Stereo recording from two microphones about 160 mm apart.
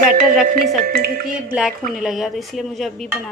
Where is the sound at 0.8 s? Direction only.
65° right (ahead or behind).